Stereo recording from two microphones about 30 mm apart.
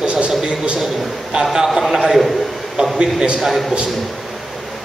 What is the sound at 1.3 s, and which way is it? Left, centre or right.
Speech, centre.